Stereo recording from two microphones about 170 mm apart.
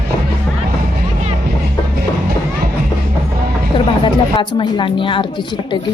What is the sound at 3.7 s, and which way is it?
Music, 30° left (ahead or behind).